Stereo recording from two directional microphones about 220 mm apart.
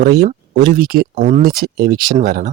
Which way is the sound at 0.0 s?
45° right (ahead or behind).